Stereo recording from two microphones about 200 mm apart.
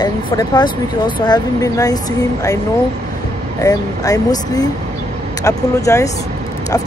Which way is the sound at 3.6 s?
15° left (ahead or behind).